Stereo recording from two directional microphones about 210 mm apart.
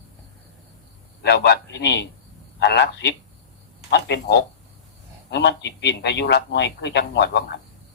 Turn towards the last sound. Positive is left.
turn(degrees=55)  # may be behind; listen again after turning